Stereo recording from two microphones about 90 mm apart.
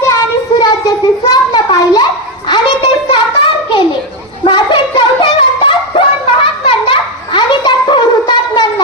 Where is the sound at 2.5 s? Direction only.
65° left (ahead or behind).